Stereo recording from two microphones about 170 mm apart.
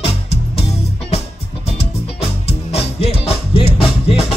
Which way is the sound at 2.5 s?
35° left (ahead or behind).